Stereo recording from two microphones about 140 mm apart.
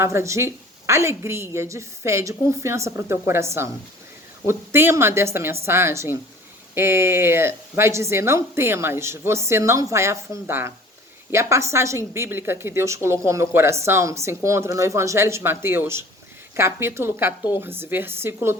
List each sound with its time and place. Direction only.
0.0 s a woman's voice: 20° right (ahead or behind)